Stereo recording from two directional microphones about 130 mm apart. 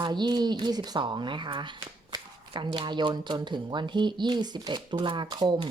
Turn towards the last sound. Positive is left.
turn(degrees=-35)  # may be behind; listen again after turning